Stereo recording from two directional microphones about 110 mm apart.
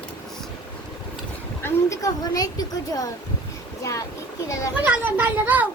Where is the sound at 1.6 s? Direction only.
30° left (ahead or behind).